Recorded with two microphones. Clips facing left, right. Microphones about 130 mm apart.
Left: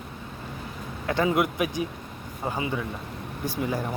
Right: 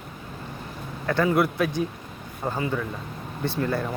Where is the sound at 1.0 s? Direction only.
20° left (ahead or behind).